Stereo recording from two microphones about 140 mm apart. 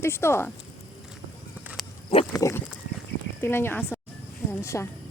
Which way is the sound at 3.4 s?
15° left (ahead or behind).